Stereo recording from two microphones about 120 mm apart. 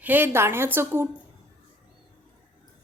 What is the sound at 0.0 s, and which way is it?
Speech, 15° right (ahead or behind).